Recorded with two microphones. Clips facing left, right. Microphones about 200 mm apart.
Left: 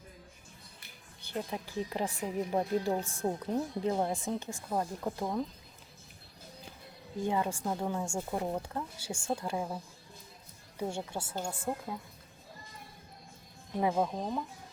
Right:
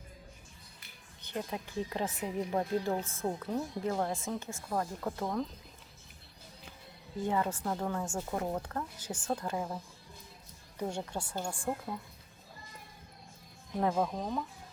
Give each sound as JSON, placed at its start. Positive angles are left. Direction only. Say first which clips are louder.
{"t": 1.9, "sound": "speech", "louder": "left 1 dB", "side_deg": 10}
{"t": 7.2, "sound": "speech", "louder": "even", "side_deg": 15}
{"t": 10.8, "sound": "speech", "louder": "even", "side_deg": 10}
{"t": 13.7, "sound": "speech", "louder": "left 1 dB", "side_deg": 10}